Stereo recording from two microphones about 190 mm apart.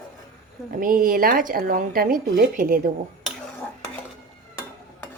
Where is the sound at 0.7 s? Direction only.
45° right (ahead or behind).